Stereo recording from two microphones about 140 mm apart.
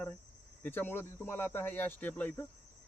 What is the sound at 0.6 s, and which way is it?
Speech, 15° left (ahead or behind).